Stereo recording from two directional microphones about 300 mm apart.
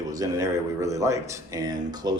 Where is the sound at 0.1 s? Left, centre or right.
Centre.